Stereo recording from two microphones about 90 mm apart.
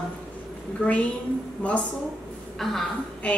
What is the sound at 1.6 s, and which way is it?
Speech, 15° left (ahead or behind).